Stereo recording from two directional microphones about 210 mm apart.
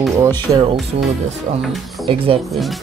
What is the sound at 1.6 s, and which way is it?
Speech, centre (ahead or behind).